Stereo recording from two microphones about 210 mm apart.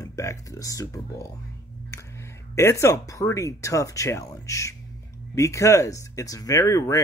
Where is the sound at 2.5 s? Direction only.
10° left (ahead or behind).